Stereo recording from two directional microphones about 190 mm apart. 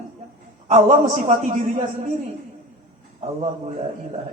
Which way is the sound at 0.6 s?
40° right (ahead or behind).